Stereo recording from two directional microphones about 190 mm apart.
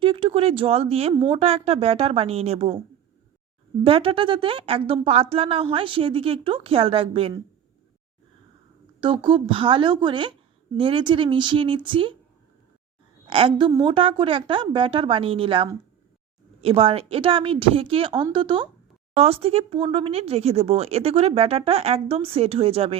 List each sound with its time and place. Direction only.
0.0 s speech: 30° right (ahead or behind)
3.8 s a woman's voice: 30° right (ahead or behind)
9.0 s a woman's voice: 25° right (ahead or behind)
13.2 s a woman's voice: 30° right (ahead or behind)